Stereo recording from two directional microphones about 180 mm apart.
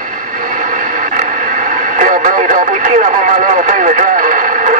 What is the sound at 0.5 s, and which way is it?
Radio, 45° right (ahead or behind).